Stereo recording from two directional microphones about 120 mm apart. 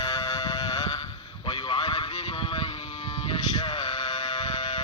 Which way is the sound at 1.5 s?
40° left (ahead or behind).